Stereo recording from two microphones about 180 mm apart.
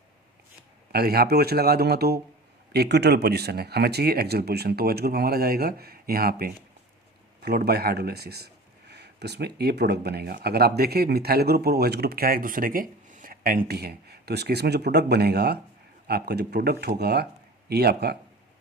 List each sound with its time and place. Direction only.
0.9 s speech: 60° right (ahead or behind)